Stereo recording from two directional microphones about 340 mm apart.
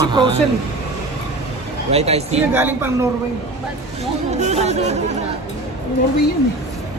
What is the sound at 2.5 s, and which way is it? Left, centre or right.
Speech, centre.